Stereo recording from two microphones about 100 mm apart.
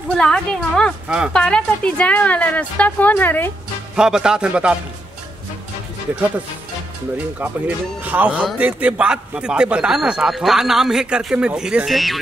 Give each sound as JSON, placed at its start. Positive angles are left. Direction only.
{"t": 0.2, "sound": "speech", "side_deg": 5}
{"t": 1.0, "sound": "speech", "side_deg": -10}
{"t": 1.3, "sound": "speech", "side_deg": 10}
{"t": 3.9, "sound": "a man's voice", "side_deg": -10}
{"t": 7.3, "sound": "a man's voice", "side_deg": -15}